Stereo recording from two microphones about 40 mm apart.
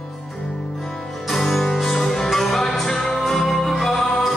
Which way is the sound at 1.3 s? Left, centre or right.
Centre.